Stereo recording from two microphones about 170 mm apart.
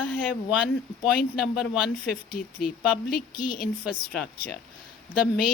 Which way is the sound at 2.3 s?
60° left (ahead or behind).